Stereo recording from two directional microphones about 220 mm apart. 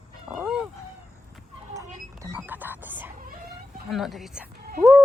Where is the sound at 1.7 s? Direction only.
15° right (ahead or behind).